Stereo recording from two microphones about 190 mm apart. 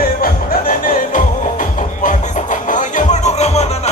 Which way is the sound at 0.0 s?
50° left (ahead or behind).